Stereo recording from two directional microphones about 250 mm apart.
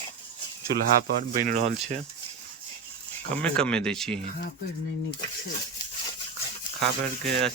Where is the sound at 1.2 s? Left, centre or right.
Right.